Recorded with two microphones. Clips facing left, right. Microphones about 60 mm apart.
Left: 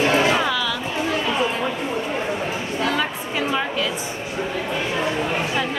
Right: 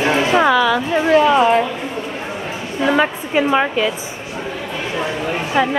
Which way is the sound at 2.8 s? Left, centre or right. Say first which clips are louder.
Right 9 dB; right.